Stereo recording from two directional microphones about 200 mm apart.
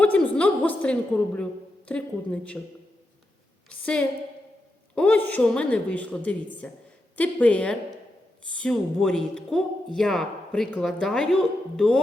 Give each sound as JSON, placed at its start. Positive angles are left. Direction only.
{"t": 0.0, "sound": "a woman's voice", "side_deg": 5}
{"t": 3.7, "sound": "a woman's voice", "side_deg": 5}